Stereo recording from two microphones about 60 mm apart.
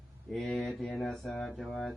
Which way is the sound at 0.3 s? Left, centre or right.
Centre.